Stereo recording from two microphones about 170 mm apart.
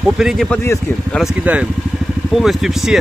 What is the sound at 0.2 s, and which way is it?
Speech, 5° left (ahead or behind).